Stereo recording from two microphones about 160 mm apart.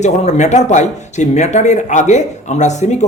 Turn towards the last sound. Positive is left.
turn(degrees=45)  # may be behind; listen again after turning